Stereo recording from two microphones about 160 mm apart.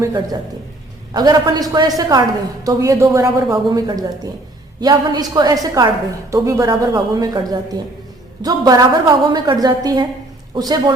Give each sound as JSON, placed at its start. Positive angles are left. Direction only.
{"t": 0.0, "sound": "a man's voice", "side_deg": -20}